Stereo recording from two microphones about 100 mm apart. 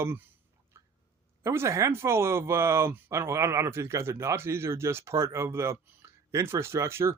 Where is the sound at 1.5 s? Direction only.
30° right (ahead or behind).